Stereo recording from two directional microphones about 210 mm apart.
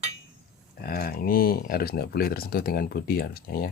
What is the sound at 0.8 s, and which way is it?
Speech, 45° left (ahead or behind).